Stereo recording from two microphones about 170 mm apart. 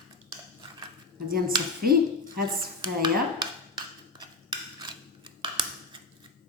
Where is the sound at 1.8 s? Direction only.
60° right (ahead or behind).